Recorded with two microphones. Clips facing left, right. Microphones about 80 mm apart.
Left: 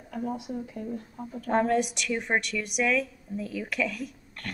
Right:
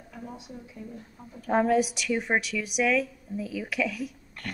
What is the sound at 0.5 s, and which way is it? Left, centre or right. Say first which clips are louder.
Speech: left 7 dB; left.